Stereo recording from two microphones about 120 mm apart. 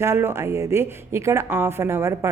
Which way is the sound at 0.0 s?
20° right (ahead or behind).